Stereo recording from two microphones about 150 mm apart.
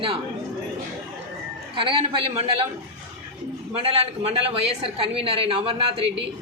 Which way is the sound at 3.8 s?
40° right (ahead or behind).